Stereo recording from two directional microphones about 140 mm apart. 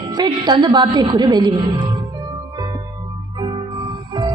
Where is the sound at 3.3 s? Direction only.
35° right (ahead or behind).